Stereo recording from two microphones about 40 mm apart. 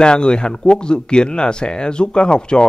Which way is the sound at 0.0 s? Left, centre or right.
Left.